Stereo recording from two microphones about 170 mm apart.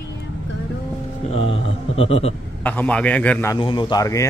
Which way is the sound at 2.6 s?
10° left (ahead or behind).